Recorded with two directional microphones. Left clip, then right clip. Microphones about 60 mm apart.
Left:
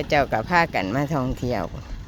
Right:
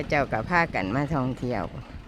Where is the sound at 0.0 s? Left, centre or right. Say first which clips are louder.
Left 4 dB; left.